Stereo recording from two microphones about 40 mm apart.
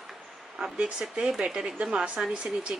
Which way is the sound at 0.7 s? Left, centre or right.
Right.